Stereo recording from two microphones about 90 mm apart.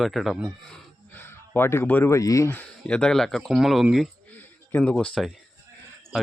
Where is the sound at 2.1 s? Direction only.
35° left (ahead or behind).